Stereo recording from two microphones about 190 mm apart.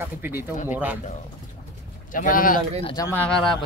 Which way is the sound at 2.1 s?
45° left (ahead or behind).